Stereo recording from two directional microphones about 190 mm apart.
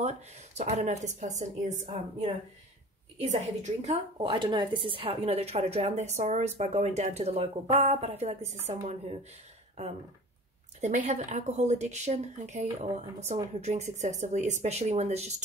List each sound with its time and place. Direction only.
0.0 s a woman's voice: 35° right (ahead or behind)
10.8 s a woman's voice: 40° right (ahead or behind)